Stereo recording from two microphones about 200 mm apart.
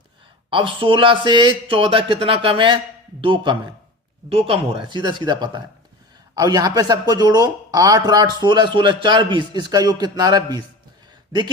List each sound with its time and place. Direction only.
0.5 s speech: 25° right (ahead or behind)